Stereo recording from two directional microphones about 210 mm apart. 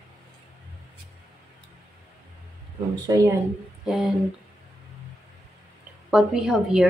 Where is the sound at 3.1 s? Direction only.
15° right (ahead or behind).